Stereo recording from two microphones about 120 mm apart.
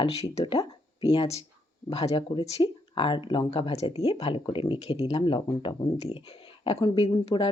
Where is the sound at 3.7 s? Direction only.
60° left (ahead or behind).